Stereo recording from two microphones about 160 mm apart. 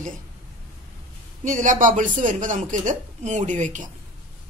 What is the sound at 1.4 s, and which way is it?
A woman's voice, 50° right (ahead or behind).